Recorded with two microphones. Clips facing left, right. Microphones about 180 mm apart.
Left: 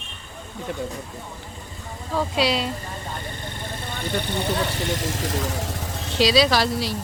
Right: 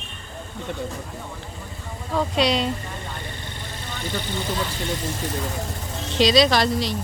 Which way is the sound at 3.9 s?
60° left (ahead or behind).